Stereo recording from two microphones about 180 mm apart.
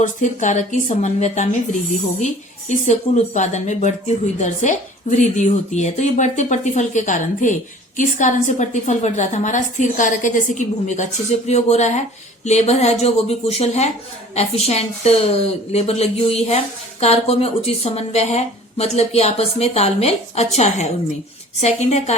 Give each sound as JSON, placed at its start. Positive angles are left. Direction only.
{"t": 0.0, "sound": "a woman's voice", "side_deg": 45}